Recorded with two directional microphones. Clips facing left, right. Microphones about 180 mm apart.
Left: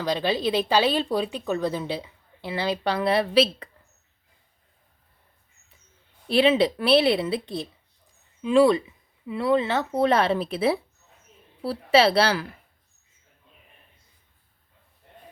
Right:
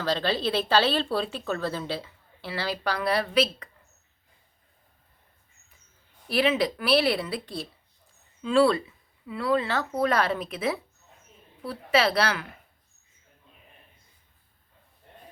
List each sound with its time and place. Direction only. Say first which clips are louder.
0.0 s speech: left 2 dB; 15° left (ahead or behind); by 3.7 s 30° left (ahead or behind)
6.2 s speech: left 5 dB; 25° left (ahead or behind)